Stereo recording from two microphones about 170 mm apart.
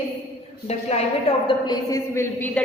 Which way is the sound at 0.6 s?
40° left (ahead or behind).